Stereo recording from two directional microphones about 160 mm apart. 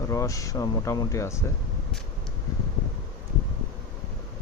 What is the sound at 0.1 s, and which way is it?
Speech, 20° left (ahead or behind).